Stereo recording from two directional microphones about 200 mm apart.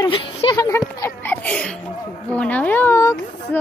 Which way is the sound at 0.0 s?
25° left (ahead or behind).